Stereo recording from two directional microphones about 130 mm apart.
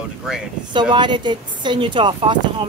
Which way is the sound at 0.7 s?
35° right (ahead or behind).